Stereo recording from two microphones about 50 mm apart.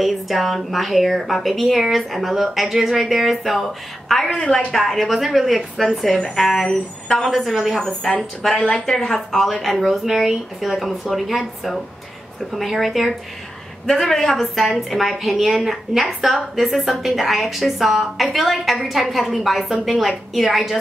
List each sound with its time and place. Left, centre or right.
0.0 s a woman's voice: centre
4.4 s a woman's voice: left
4.7 s a woman's voice: centre
7.2 s a woman's voice: centre